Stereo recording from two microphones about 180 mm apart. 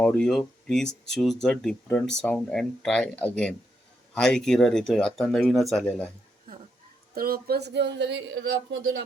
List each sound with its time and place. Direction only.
0.0 s speech: 5° left (ahead or behind)
7.1 s speech: 55° right (ahead or behind); by 8.8 s 75° right (ahead or behind)